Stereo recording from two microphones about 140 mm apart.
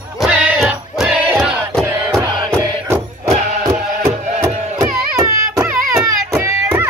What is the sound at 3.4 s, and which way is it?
Music, 60° right (ahead or behind).